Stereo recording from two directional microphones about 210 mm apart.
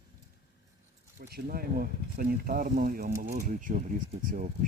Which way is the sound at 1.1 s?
45° right (ahead or behind).